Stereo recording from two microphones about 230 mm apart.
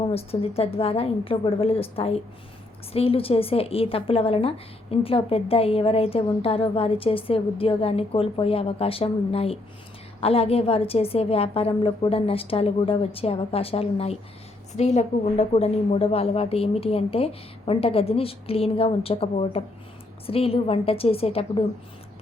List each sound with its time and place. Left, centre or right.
0.1 s a woman's voice: left